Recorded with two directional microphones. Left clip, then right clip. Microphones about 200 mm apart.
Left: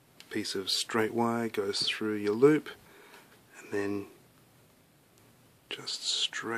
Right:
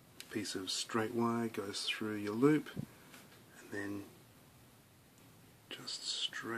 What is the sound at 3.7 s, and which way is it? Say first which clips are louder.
Speech: left 10 dB; 45° left (ahead or behind).